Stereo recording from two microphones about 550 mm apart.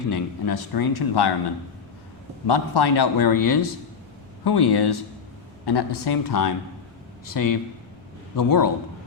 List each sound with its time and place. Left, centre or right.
0.1 s a man's voice: left
2.5 s a man's voice: left